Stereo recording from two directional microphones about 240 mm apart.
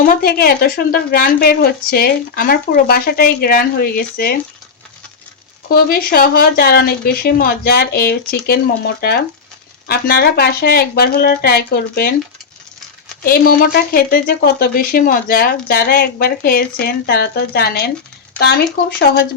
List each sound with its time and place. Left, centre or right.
0.0 s a woman's voice: left
5.7 s a woman's voice: left
13.2 s a woman's voice: left